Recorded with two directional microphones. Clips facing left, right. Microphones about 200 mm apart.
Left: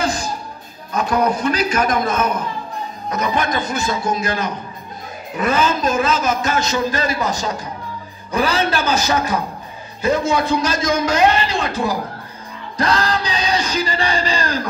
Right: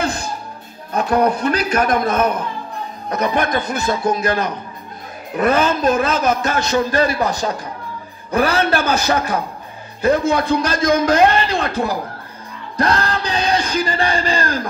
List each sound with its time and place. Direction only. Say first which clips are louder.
0.0 s music: left 1 dB; 60° right (ahead or behind)
0.9 s a man's voice: right 2 dB; 60° right (ahead or behind)